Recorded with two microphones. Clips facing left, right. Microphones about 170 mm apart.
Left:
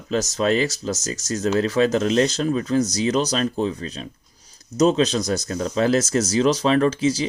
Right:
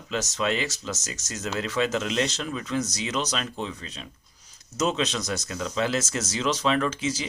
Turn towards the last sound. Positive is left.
turn(degrees=35)  # may be behind; listen again after turning